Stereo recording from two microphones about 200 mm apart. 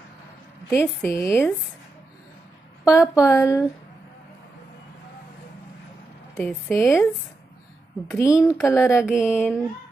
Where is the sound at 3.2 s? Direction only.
15° left (ahead or behind).